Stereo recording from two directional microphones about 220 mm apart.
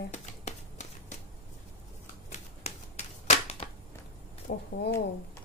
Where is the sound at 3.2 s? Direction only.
30° left (ahead or behind).